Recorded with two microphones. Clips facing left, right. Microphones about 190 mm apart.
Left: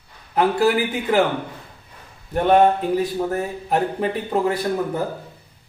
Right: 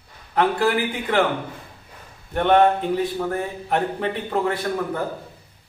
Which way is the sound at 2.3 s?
10° left (ahead or behind).